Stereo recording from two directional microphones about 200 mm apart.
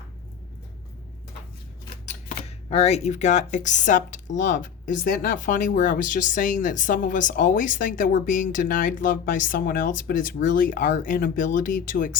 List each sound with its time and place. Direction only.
2.0 s speech: 35° left (ahead or behind)